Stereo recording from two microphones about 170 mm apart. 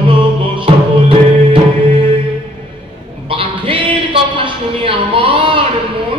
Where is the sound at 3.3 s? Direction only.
30° right (ahead or behind).